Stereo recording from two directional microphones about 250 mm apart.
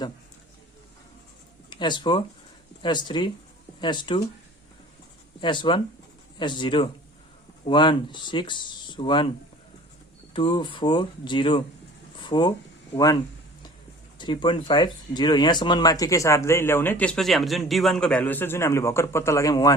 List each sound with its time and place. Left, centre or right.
1.7 s speech: centre
5.4 s speech: centre
10.3 s speech: centre
14.2 s speech: centre